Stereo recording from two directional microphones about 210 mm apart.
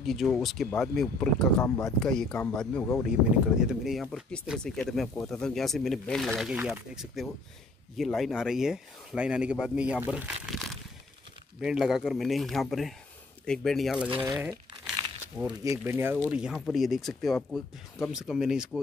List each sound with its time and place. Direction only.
0.0 s speech: centre (ahead or behind)
14.2 s speech: 15° right (ahead or behind)